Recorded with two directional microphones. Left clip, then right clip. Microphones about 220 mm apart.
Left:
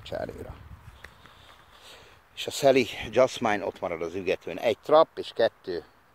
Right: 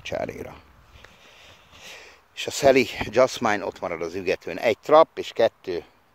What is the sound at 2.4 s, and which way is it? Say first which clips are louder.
Speech: right 3 dB; 25° right (ahead or behind).